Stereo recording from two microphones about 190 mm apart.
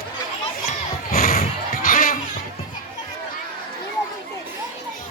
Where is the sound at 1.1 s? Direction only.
50° left (ahead or behind).